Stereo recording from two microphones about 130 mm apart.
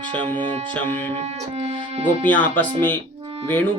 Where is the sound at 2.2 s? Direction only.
15° left (ahead or behind).